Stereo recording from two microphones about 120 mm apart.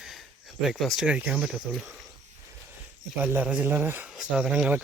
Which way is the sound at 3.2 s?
15° right (ahead or behind).